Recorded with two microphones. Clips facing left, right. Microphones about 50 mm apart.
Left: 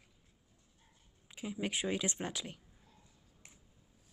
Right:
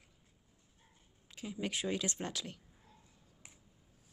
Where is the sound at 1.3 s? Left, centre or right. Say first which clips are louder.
Left 1 dB; centre.